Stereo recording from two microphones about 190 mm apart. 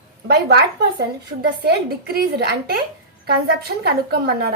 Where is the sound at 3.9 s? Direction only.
55° right (ahead or behind).